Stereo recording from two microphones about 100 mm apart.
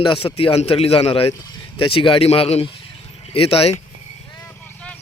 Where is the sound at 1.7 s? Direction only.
60° left (ahead or behind).